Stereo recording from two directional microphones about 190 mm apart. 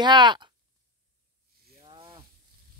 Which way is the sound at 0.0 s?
25° right (ahead or behind).